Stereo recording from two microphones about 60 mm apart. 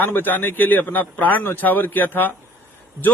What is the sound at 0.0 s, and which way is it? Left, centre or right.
A man's voice, left.